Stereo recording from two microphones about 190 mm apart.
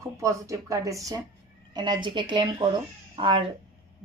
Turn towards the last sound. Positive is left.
turn(degrees=-30)  # may be behind; listen again after turning